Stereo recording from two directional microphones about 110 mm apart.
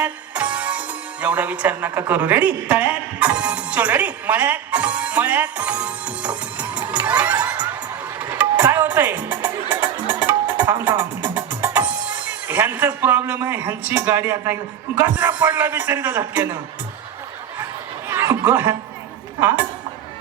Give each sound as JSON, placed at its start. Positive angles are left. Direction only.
{"t": 0.0, "sound": "speech", "side_deg": -15}
{"t": 8.2, "sound": "music", "side_deg": -20}
{"t": 18.1, "sound": "a sound", "side_deg": -20}
{"t": 19.4, "sound": "a woman's voice", "side_deg": -20}